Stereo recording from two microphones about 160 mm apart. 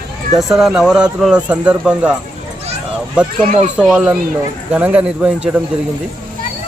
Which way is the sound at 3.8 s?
5° right (ahead or behind).